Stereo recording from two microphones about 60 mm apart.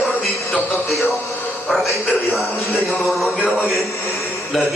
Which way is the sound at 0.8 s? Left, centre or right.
Centre.